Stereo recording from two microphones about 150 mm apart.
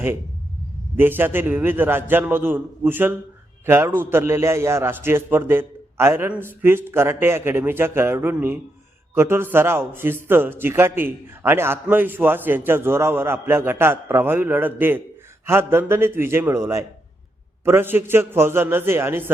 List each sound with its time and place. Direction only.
0.9 s speech: 15° right (ahead or behind)